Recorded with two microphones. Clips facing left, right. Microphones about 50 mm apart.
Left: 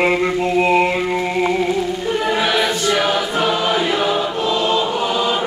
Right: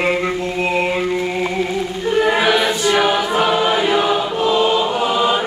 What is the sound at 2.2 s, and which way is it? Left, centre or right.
Choir, centre.